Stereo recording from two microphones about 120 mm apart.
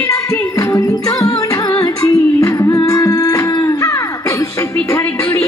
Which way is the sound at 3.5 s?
30° left (ahead or behind).